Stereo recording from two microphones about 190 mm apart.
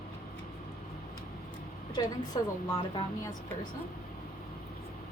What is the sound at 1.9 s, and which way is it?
Speech, 20° left (ahead or behind).